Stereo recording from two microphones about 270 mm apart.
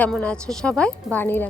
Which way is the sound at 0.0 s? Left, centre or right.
Centre.